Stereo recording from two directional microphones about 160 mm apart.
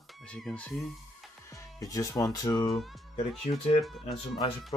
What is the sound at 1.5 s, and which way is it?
Speech, 20° left (ahead or behind).